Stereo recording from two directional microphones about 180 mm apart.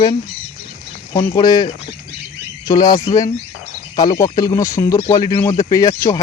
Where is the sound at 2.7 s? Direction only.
20° left (ahead or behind).